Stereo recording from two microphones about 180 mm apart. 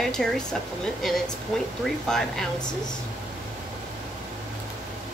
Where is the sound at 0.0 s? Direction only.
5° left (ahead or behind).